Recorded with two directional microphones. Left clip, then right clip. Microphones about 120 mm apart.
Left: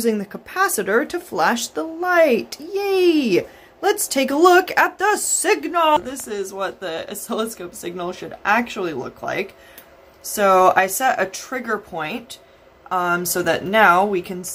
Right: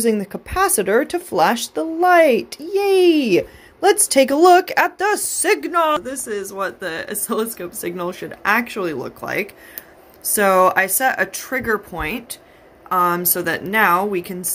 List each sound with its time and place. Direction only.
0.0 s speech: 30° right (ahead or behind)
6.0 s speech: 15° right (ahead or behind)